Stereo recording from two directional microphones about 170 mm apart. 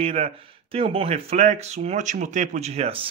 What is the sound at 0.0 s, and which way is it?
Speech, 35° right (ahead or behind).